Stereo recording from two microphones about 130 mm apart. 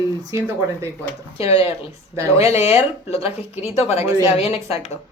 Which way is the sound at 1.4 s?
50° left (ahead or behind).